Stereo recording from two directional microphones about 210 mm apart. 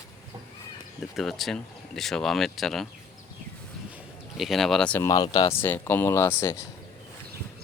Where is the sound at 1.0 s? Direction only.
Centre (ahead or behind).